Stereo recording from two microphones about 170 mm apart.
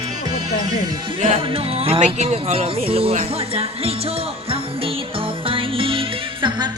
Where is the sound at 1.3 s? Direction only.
35° right (ahead or behind).